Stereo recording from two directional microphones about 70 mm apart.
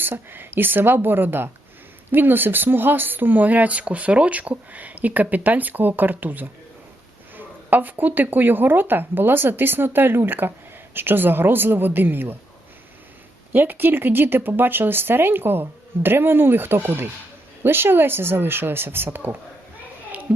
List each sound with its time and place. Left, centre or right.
0.0 s speech: right
13.5 s speech: right